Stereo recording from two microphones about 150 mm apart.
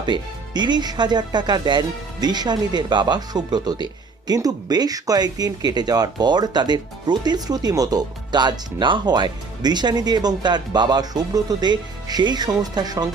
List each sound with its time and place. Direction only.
0.0 s speech: 30° right (ahead or behind)